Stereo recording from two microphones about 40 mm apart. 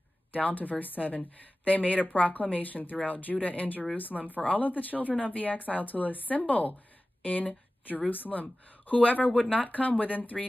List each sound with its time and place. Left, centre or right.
0.3 s speech: left